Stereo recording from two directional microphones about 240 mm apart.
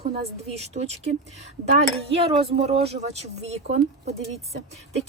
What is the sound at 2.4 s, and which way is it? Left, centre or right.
Speech, right.